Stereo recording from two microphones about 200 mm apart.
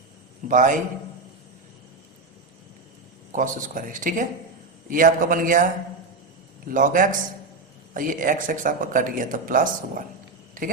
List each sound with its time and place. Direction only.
0.4 s speech: 40° right (ahead or behind)
3.3 s speech: 40° right (ahead or behind)
6.7 s speech: 40° right (ahead or behind)